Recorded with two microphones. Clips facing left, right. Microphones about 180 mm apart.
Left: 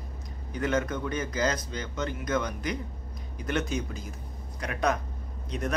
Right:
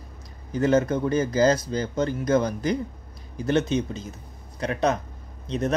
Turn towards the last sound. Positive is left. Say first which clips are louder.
# right 6 dB
turn(degrees=-25)  # may be behind; listen again after turning